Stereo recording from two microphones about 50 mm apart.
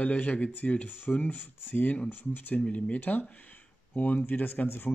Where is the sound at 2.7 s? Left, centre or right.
Left.